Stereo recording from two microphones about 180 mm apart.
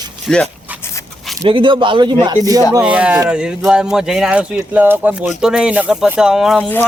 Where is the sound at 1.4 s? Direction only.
30° right (ahead or behind).